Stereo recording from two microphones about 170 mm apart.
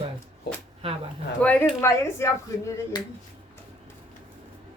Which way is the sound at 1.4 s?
10° left (ahead or behind).